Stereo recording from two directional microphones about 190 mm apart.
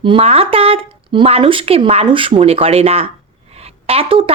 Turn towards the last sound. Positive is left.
turn(degrees=-30)  # may be behind; listen again after turning